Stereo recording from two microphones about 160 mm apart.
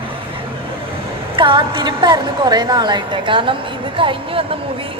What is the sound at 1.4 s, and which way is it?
A woman's voice, 30° right (ahead or behind).